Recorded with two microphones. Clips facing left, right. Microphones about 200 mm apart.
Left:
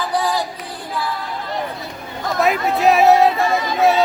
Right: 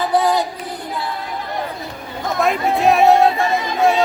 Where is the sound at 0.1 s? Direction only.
20° right (ahead or behind).